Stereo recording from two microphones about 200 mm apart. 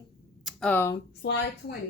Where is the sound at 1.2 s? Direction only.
60° left (ahead or behind).